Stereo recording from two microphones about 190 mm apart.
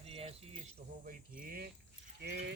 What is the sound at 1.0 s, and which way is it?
Speech, 45° right (ahead or behind).